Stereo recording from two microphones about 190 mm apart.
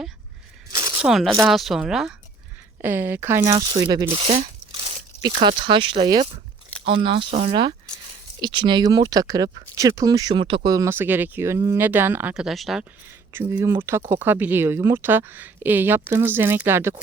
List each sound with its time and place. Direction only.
0.7 s a sound: 20° right (ahead or behind)
1.0 s speech: centre (ahead or behind)
13.1 s speech: 10° right (ahead or behind)